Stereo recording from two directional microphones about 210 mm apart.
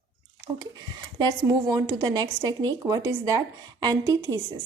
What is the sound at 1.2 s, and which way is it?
A woman's voice, 20° right (ahead or behind).